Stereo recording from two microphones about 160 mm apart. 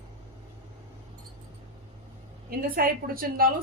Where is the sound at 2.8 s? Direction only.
65° right (ahead or behind).